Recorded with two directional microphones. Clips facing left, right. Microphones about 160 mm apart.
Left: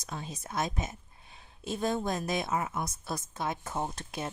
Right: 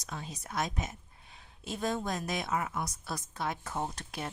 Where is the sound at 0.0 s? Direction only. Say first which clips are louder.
Left 2 dB; 25° left (ahead or behind).